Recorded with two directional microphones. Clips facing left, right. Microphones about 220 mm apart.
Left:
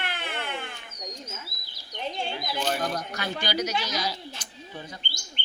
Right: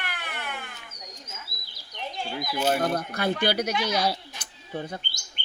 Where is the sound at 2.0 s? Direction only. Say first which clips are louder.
Left 1 dB; 25° left (ahead or behind).